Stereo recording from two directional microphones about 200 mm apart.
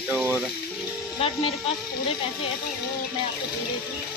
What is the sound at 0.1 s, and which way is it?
Water, 10° right (ahead or behind).